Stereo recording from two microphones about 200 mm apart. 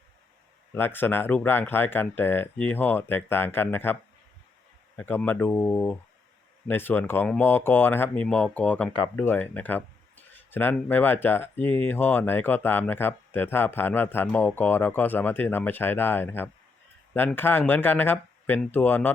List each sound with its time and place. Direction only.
0.7 s speech: 10° left (ahead or behind)
4.9 s speech: 10° left (ahead or behind)